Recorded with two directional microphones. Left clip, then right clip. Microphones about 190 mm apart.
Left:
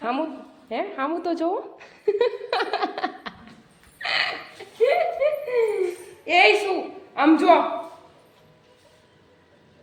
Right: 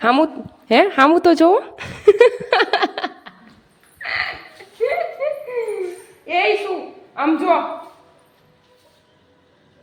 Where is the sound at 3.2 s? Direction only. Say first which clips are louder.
Left 4 dB; 55° left (ahead or behind).